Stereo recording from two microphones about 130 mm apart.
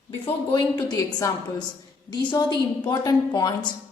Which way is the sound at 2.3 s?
30° left (ahead or behind).